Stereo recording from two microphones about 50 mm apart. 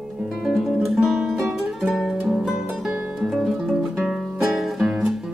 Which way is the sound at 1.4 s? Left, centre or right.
Centre.